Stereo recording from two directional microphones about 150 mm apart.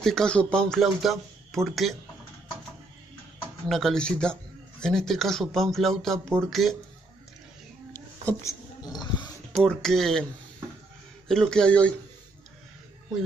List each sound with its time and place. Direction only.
0.0 s speech: 5° left (ahead or behind)
3.6 s speech: centre (ahead or behind)
8.3 s a sound: 20° left (ahead or behind)
9.6 s speech: centre (ahead or behind)
11.2 s speech: 5° left (ahead or behind)